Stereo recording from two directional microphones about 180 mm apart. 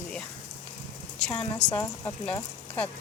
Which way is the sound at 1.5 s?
15° left (ahead or behind).